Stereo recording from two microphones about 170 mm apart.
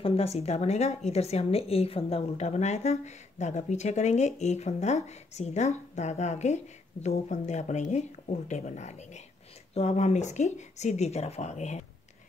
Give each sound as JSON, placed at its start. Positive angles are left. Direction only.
{"t": 0.0, "sound": "a woman's voice", "side_deg": 35}